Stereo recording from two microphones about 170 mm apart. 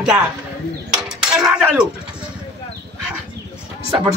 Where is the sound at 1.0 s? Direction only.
5° right (ahead or behind).